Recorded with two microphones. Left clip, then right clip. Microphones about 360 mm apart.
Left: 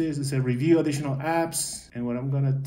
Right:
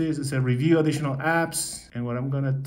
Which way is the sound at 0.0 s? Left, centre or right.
Right.